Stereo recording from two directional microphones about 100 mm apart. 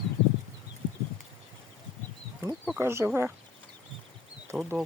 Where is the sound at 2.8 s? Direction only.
25° right (ahead or behind).